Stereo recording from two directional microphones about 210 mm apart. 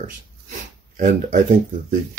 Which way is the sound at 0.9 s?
35° right (ahead or behind).